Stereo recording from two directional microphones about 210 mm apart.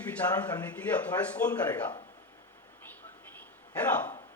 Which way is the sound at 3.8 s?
5° left (ahead or behind).